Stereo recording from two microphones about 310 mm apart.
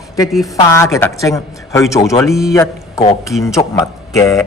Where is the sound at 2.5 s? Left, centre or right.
Centre.